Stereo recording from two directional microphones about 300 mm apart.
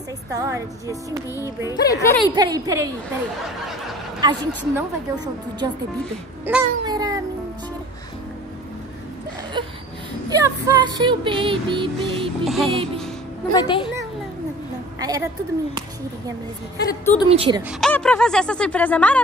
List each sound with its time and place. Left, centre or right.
0.3 s music: centre
1.7 s speech: centre
2.2 s music: centre
4.2 s music: centre
6.4 s a sound: centre
10.3 s music: centre
12.4 s speech: centre
12.7 s music: centre
13.5 s speech: centre
15.0 s a sound: centre
17.3 s speech: centre
17.6 s speech: centre